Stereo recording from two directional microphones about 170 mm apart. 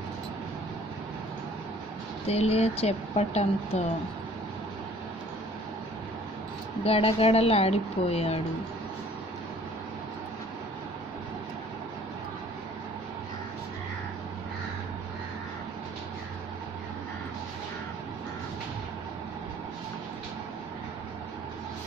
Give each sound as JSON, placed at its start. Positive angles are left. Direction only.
{"t": 2.2, "sound": "speech", "side_deg": 35}
{"t": 6.8, "sound": "speech", "side_deg": 35}